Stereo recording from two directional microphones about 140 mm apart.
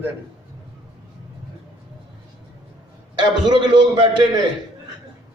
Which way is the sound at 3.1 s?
35° right (ahead or behind).